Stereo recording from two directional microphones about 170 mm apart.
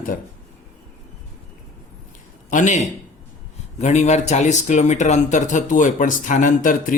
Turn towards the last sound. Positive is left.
turn(degrees=50)  # may be behind; listen again after turning